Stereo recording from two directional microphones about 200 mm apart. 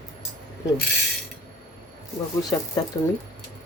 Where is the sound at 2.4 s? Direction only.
20° left (ahead or behind).